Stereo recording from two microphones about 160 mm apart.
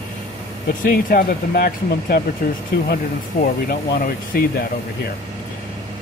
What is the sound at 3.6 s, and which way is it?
Speech, 65° left (ahead or behind).